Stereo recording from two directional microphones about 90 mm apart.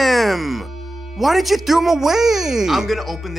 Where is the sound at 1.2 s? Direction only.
Centre (ahead or behind).